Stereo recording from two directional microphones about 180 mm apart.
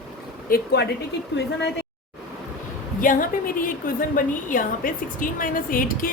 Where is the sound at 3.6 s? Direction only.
50° left (ahead or behind).